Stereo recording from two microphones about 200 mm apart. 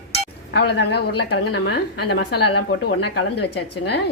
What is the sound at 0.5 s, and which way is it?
A woman's voice, 55° left (ahead or behind).